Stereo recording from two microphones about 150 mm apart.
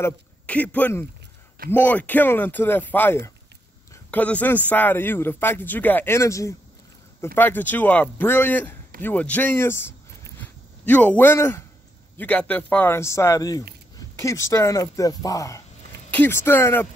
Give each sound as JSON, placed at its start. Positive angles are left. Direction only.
{"t": 0.0, "sound": "a man's voice", "side_deg": 10}